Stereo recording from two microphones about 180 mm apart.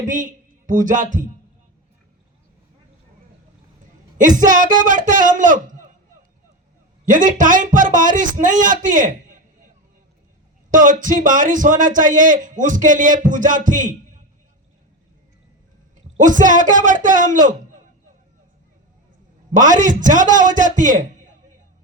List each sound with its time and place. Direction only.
0.1 s speech: 45° right (ahead or behind)
4.2 s a man's voice: 45° right (ahead or behind)
7.0 s a man's voice: 45° right (ahead or behind)
10.7 s a man's voice: 45° right (ahead or behind)
16.1 s a man's voice: 45° right (ahead or behind)
19.5 s a man's voice: 45° right (ahead or behind)